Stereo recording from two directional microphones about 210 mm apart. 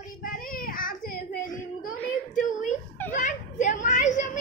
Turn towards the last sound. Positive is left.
turn(degrees=35)  # may be behind; listen again after turning